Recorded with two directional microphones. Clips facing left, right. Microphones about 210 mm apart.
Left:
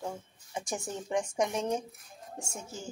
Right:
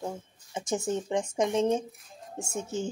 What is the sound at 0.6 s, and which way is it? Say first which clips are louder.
Speech: right 7 dB; 20° right (ahead or behind).